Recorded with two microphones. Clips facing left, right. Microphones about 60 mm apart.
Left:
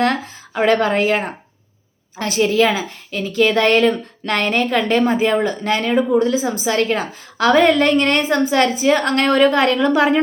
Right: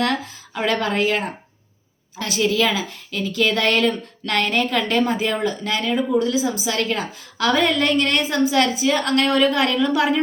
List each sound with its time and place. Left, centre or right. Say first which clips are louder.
0.0 s a woman's voice: left 4 dB; left